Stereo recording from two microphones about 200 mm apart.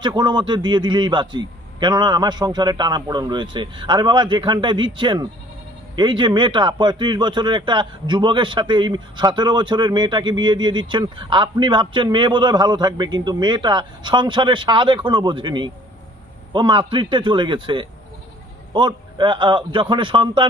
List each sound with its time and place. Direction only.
0.0 s speech: 20° right (ahead or behind)